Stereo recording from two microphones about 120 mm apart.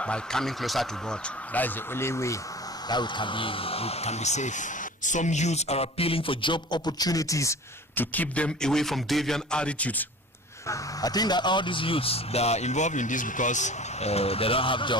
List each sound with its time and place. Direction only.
0.0 s speech: 5° left (ahead or behind)
1.5 s speech: 20° left (ahead or behind)
2.9 s speech: 40° left (ahead or behind); by 10.0 s 10° left (ahead or behind)
10.7 s speech: 30° left (ahead or behind)